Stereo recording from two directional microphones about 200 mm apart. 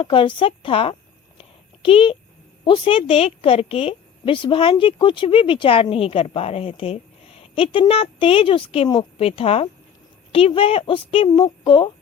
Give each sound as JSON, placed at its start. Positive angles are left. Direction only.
{"t": 0.0, "sound": "a woman's voice", "side_deg": 25}
{"t": 1.4, "sound": "a sound", "side_deg": 25}
{"t": 2.6, "sound": "a woman's voice", "side_deg": 25}